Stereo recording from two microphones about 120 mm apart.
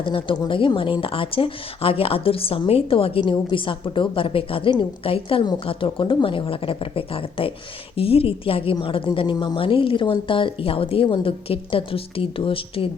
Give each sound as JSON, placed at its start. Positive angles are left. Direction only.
{"t": 0.0, "sound": "speech", "side_deg": 45}